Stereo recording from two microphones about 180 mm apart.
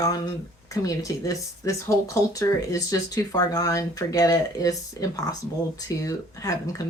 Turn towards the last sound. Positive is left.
turn(degrees=20)  # may be behind; listen again after turning